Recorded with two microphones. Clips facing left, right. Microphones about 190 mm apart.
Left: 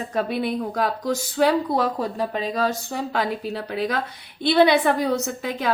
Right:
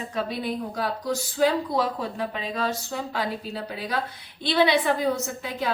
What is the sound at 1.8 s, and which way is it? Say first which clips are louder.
Speech: left 3 dB; 40° left (ahead or behind).